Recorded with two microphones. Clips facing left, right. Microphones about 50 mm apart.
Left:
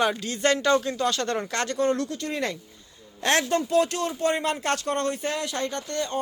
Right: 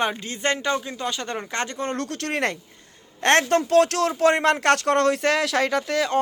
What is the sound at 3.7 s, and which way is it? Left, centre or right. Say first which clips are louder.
Speech: right 5 dB; right.